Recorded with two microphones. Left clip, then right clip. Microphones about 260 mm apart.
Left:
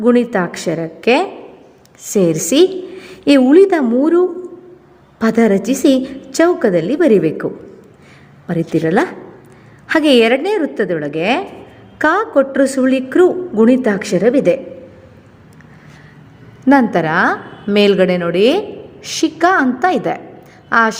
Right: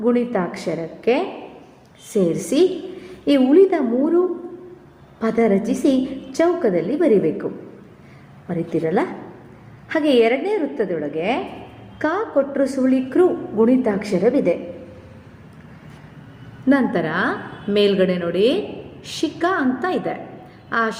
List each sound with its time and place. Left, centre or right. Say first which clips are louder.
0.0 s a woman's voice: left 6 dB; left
5.2 s a woman's voice: left 5 dB; left
8.4 s a woman's voice: left 6 dB; left
16.6 s a woman's voice: left 7 dB; left